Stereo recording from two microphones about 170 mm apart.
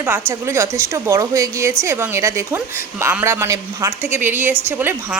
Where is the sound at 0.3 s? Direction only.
15° right (ahead or behind).